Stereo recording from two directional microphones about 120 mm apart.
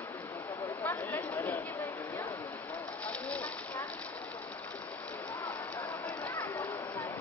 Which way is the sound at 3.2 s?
10° left (ahead or behind).